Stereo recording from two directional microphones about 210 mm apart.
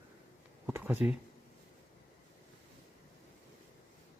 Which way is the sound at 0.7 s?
10° right (ahead or behind).